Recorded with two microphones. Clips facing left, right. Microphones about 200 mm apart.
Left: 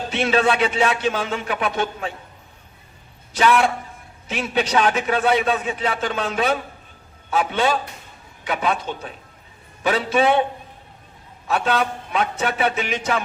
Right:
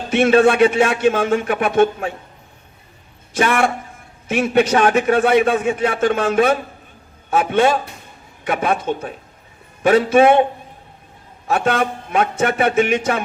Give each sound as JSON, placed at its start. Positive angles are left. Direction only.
{"t": 0.1, "sound": "a man's voice", "side_deg": -50}
{"t": 3.3, "sound": "a man's voice", "side_deg": -50}
{"t": 11.4, "sound": "a man's voice", "side_deg": -50}